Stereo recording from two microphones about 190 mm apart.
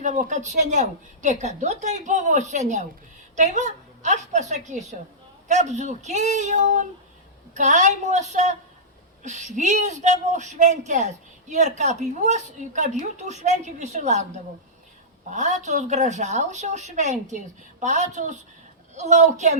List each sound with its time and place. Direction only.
0.0 s speech: 40° right (ahead or behind)
15.3 s speech: 40° right (ahead or behind)